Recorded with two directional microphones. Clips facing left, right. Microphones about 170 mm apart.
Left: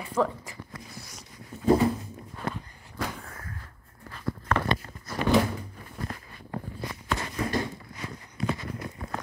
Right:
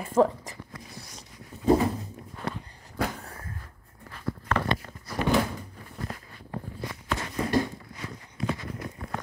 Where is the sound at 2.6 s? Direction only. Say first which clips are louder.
Right 4 dB; 35° right (ahead or behind).